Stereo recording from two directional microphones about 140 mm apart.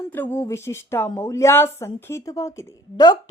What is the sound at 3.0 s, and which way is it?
Speech, 30° left (ahead or behind).